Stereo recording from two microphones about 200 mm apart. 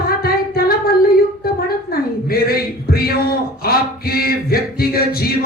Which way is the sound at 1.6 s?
50° left (ahead or behind).